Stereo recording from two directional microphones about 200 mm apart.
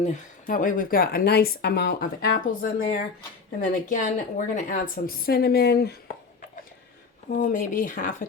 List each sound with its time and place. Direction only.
0.0 s a woman's voice: 40° left (ahead or behind)
7.3 s a woman's voice: 45° left (ahead or behind)